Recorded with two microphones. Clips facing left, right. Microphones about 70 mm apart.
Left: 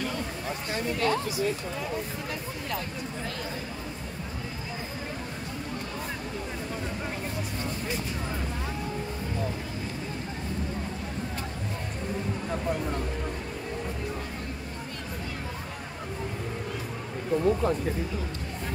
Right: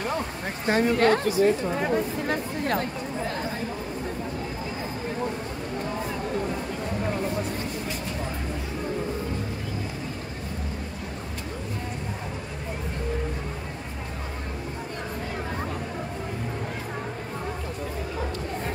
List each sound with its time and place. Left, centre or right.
0.7 s speech: right